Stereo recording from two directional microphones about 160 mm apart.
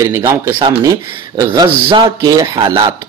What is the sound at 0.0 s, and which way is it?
A man's voice, 15° right (ahead or behind).